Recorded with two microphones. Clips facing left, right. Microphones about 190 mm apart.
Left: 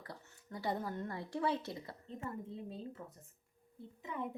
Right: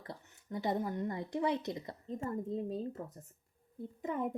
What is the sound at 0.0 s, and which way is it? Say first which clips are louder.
Speech: right 3 dB; 25° right (ahead or behind).